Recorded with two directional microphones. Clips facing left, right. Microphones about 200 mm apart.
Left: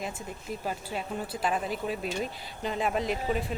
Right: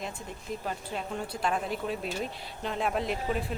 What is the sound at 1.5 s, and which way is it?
Speech, 5° left (ahead or behind).